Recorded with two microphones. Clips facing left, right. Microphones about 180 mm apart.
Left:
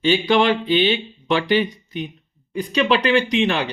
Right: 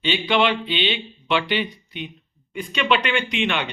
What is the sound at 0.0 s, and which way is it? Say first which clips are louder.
Speech: left 4 dB; 40° left (ahead or behind).